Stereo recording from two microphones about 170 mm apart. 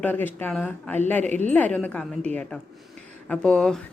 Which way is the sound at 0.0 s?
10° left (ahead or behind).